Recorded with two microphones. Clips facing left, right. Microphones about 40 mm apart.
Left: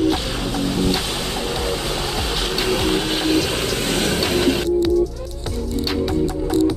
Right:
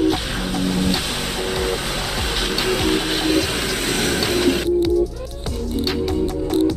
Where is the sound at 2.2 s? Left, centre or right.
Centre.